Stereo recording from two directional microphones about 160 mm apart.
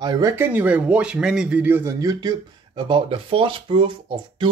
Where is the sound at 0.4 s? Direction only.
10° right (ahead or behind).